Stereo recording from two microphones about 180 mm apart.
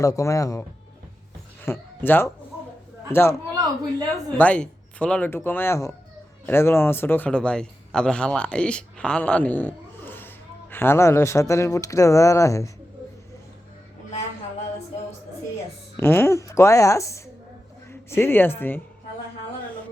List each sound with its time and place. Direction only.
0.0 s speech: 15° left (ahead or behind)
1.6 s speech: 10° left (ahead or behind)
4.4 s a man's voice: 5° left (ahead or behind)
16.0 s speech: 15° left (ahead or behind)